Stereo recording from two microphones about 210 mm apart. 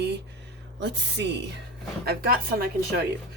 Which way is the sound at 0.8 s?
55° right (ahead or behind).